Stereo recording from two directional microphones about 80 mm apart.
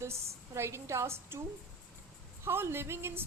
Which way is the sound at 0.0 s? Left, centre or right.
Right.